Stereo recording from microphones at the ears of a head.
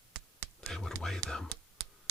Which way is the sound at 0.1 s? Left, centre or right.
Right.